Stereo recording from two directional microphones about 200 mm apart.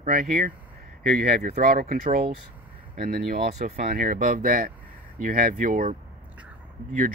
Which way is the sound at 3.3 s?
40° right (ahead or behind).